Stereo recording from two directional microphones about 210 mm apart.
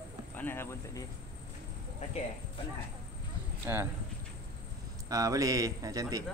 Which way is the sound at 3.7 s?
10° right (ahead or behind).